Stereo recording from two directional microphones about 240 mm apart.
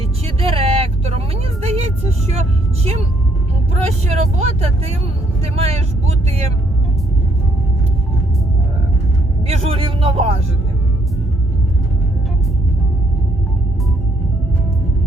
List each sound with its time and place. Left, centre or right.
0.3 s vehicle: right
1.6 s music: right
2.3 s vehicle: right
9.5 s music: right